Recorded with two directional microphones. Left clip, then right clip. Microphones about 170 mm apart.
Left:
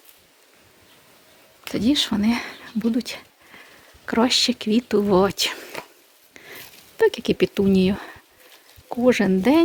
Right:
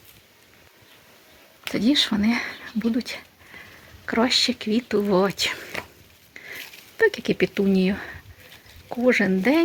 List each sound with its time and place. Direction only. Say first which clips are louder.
1.6 s speech: even; 15° left (ahead or behind); by 5.7 s 40° left (ahead or behind)
6.3 s a sound: right 4 dB; 35° left (ahead or behind)
7.0 s speech: left 1 dB; 30° left (ahead or behind)
8.9 s speech: left 1 dB; 30° left (ahead or behind)